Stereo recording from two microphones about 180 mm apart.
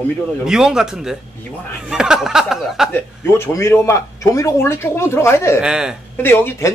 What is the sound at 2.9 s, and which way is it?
Speech, 15° left (ahead or behind).